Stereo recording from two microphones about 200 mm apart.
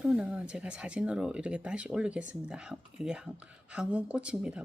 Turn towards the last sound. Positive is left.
turn(degrees=-5)  # may be behind; listen again after turning